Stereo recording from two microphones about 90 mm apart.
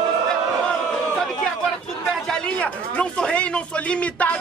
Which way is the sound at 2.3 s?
15° left (ahead or behind).